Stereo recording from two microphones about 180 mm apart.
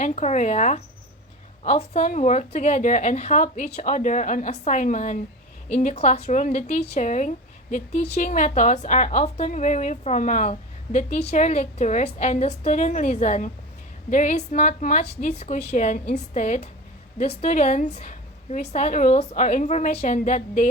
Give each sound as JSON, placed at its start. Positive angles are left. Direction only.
{"t": 0.0, "sound": "a woman's voice", "side_deg": 40}